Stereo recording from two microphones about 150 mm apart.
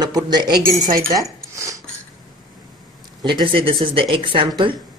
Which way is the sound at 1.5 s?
20° right (ahead or behind).